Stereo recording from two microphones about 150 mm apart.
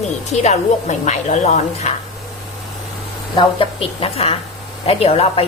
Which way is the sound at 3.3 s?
35° left (ahead or behind).